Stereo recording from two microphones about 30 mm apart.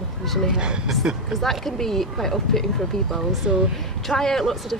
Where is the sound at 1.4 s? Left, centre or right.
Centre.